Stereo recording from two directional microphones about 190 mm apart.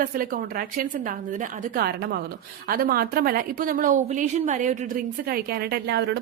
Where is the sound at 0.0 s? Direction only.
45° right (ahead or behind).